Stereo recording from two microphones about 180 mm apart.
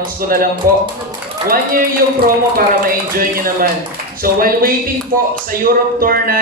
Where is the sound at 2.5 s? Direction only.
50° right (ahead or behind).